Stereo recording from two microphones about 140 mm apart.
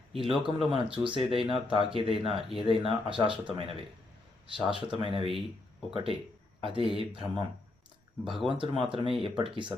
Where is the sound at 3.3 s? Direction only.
35° right (ahead or behind).